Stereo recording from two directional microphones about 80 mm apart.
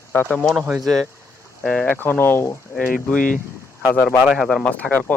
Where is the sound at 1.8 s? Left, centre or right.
Left.